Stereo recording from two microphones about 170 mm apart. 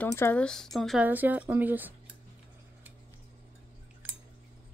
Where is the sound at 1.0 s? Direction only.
10° right (ahead or behind).